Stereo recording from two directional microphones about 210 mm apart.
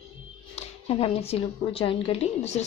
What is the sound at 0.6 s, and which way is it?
Speech, 30° left (ahead or behind).